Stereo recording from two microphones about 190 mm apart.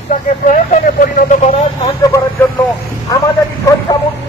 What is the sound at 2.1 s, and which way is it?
Speech, 10° left (ahead or behind).